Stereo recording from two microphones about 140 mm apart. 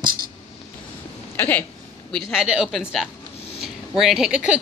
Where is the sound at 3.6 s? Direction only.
Centre (ahead or behind).